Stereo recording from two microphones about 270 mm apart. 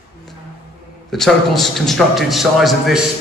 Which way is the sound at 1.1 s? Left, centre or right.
Centre.